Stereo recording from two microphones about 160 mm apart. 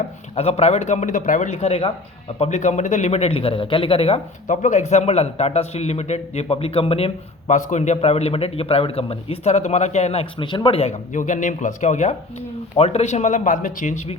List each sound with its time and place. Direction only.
0.3 s a man's voice: 40° left (ahead or behind)
4.4 s a man's voice: 50° left (ahead or behind)